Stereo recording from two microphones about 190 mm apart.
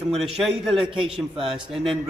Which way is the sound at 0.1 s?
Centre (ahead or behind).